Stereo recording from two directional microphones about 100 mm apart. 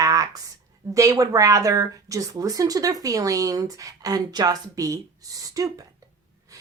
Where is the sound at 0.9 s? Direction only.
35° right (ahead or behind).